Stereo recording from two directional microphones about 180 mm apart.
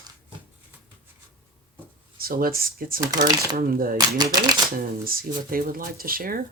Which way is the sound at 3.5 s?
55° right (ahead or behind).